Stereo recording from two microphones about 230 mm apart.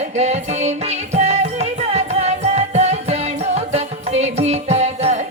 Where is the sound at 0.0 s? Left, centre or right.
Right.